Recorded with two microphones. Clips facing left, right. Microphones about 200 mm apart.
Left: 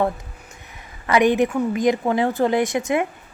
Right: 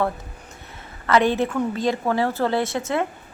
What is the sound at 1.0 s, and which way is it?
A woman's voice, 15° left (ahead or behind).